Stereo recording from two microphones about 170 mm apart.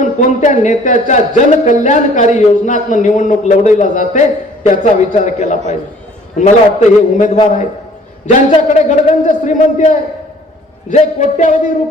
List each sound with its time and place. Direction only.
0.0 s speech: 45° left (ahead or behind)
8.3 s speech: 45° left (ahead or behind)